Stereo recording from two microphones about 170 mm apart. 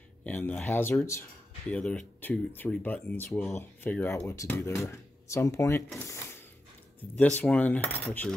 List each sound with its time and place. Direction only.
0.2 s speech: 10° left (ahead or behind)
7.2 s speech: 10° left (ahead or behind)